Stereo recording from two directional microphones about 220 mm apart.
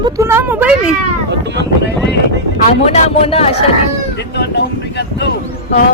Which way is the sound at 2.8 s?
25° left (ahead or behind).